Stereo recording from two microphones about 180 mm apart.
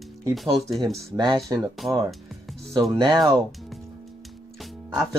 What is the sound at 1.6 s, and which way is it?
Speech, centre (ahead or behind).